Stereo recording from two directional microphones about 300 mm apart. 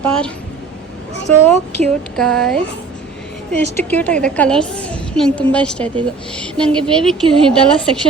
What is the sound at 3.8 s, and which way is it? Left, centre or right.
Speech, centre.